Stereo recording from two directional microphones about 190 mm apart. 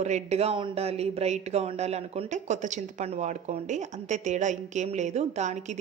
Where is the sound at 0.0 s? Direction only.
35° right (ahead or behind).